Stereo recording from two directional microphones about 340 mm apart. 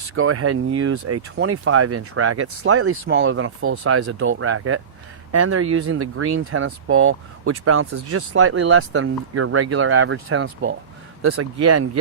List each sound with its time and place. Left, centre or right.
0.1 s speech: right